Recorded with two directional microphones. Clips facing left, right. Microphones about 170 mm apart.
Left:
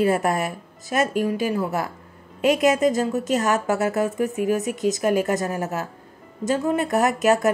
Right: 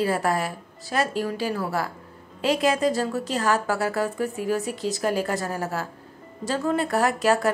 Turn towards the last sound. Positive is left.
turn(degrees=20)  # may be behind; listen again after turning